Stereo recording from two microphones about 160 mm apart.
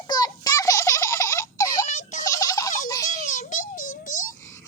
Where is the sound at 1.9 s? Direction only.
50° left (ahead or behind).